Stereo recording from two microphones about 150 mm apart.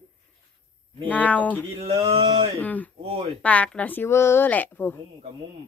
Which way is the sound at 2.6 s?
10° left (ahead or behind).